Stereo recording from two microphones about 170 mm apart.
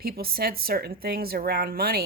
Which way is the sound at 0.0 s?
60° right (ahead or behind).